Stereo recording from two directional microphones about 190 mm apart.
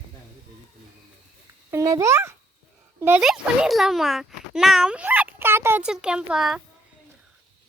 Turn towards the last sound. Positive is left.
turn(degrees=0)  # may be behind; listen again after turning